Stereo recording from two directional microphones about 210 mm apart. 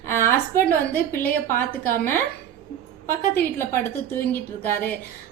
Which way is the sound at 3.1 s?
10° left (ahead or behind).